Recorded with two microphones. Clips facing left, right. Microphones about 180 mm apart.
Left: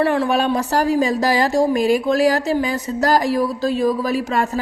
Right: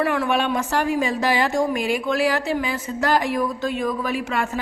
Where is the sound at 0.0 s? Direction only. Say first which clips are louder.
Left 4 dB; 30° left (ahead or behind).